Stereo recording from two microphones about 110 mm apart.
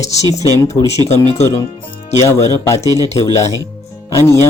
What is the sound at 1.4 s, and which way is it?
Speech, 30° left (ahead or behind).